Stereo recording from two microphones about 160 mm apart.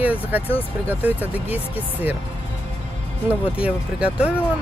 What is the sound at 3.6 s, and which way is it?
Speech, 5° right (ahead or behind).